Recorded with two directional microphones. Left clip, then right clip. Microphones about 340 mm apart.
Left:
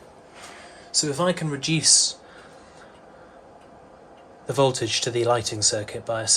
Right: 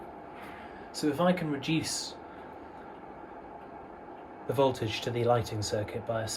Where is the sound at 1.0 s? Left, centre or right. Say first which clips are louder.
Left 5 dB; left.